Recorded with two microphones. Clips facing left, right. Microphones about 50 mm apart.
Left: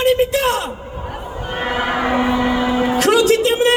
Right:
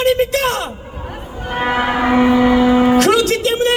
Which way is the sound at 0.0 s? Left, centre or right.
Centre.